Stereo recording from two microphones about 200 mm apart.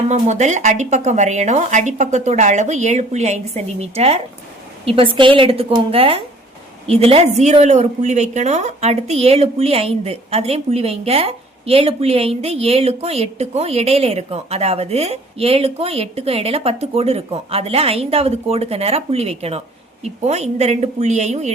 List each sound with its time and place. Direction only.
0.1 s a woman's voice: 35° right (ahead or behind)